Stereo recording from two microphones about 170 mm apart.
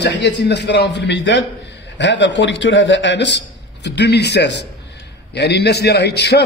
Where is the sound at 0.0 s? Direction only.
90° left.